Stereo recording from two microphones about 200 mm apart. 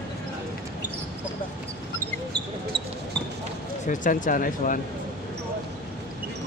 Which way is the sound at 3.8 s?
40° left (ahead or behind).